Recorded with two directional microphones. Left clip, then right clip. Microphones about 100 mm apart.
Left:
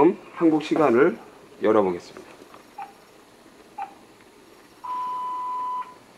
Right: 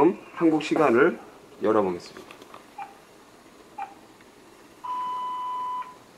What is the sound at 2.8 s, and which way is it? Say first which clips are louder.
Cat: left 2 dB; 15° left (ahead or behind).